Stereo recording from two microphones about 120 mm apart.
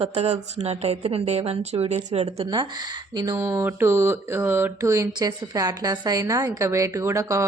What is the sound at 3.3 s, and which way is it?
Speech, 20° right (ahead or behind).